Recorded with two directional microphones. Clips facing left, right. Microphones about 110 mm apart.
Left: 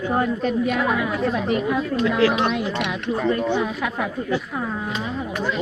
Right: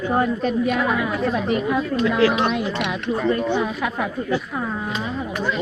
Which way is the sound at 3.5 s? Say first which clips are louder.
Right 1 dB; 25° right (ahead or behind).